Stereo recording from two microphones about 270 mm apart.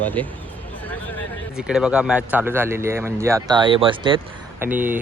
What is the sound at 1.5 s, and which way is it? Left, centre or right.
Speech, centre.